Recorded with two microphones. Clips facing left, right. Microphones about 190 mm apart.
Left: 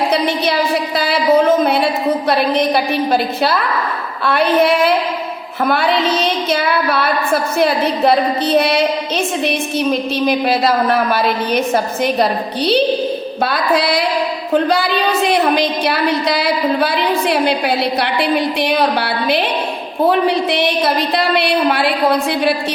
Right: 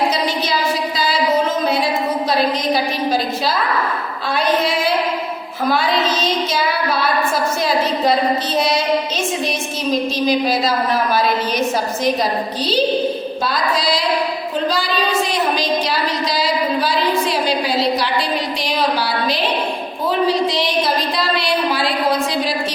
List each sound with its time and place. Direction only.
0.9 s a sound: 60° left (ahead or behind)
4.2 s a woman's voice: 60° left (ahead or behind)
8.5 s a woman's voice: 60° left (ahead or behind)
10.2 s a woman's voice: 60° left (ahead or behind)